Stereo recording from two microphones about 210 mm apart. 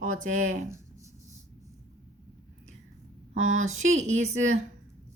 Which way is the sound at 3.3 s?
70° right (ahead or behind).